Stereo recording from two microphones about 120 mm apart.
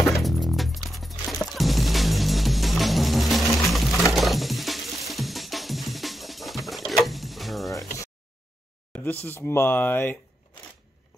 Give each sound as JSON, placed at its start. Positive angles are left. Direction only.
{"t": 0.1, "sound": "music", "side_deg": 0}
{"t": 7.7, "sound": "a sound", "side_deg": 25}
{"t": 9.5, "sound": "speech", "side_deg": 20}